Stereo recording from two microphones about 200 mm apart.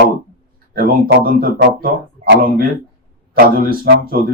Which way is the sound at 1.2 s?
45° right (ahead or behind).